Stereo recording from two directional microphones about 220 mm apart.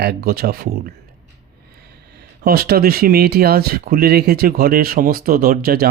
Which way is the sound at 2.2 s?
45° right (ahead or behind).